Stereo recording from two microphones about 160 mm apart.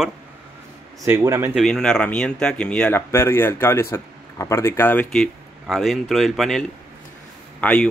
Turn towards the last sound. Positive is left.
turn(degrees=10)  # may be behind; listen again after turning